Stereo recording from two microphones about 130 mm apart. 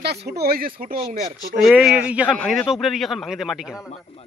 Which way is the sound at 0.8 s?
90° right.